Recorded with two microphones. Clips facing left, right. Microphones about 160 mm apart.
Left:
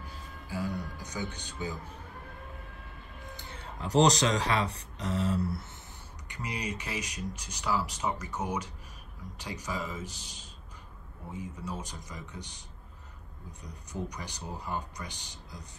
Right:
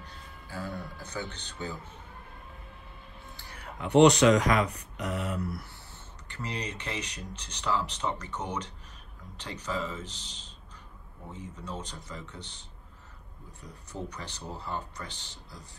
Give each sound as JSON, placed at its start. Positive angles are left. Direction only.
{"t": 0.0, "sound": "music", "side_deg": 10}
{"t": 1.6, "sound": "speech", "side_deg": 10}
{"t": 3.3, "sound": "speech", "side_deg": 25}
{"t": 6.2, "sound": "speech", "side_deg": 15}